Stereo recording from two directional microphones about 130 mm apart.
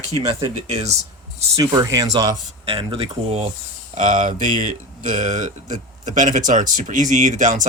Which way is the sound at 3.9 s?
85° right.